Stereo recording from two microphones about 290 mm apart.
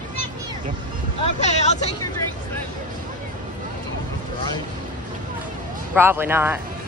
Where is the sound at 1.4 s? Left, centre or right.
Left.